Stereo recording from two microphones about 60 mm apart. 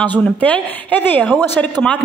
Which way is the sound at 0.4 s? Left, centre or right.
Left.